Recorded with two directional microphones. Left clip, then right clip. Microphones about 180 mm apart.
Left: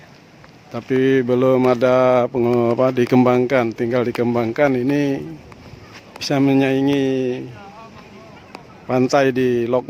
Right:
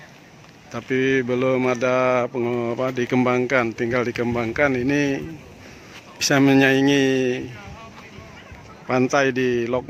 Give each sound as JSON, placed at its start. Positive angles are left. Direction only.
{"t": 0.7, "sound": "speech", "side_deg": 15}
{"t": 8.9, "sound": "speech", "side_deg": 15}